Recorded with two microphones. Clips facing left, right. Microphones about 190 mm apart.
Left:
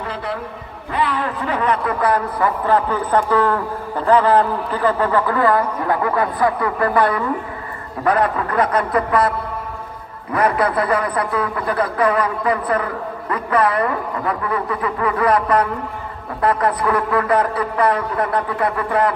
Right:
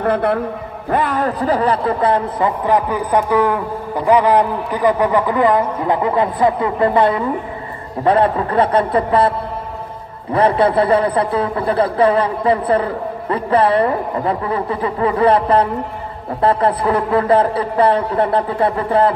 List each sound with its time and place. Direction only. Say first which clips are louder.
0.0 s a man's voice: right 10 dB; 55° right (ahead or behind); by 9.3 s 30° right (ahead or behind)
10.3 s a man's voice: right 4 dB; 30° right (ahead or behind)